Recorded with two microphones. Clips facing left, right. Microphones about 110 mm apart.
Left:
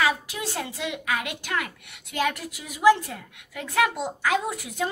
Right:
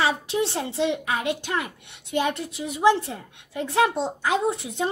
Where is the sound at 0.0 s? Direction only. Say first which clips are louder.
Right 2 dB; 30° right (ahead or behind).